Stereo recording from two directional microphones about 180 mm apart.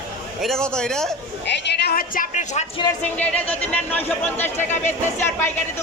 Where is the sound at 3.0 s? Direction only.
10° left (ahead or behind).